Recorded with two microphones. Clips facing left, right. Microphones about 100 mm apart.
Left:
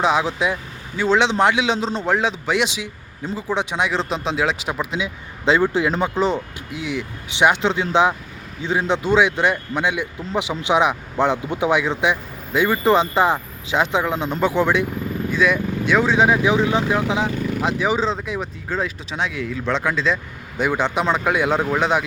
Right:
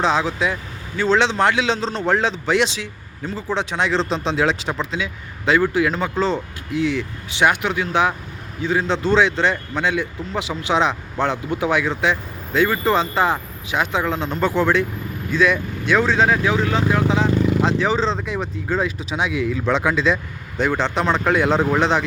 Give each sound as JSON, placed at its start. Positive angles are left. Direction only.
{"t": 0.0, "sound": "speech", "side_deg": 10}
{"t": 20.6, "sound": "speech", "side_deg": 10}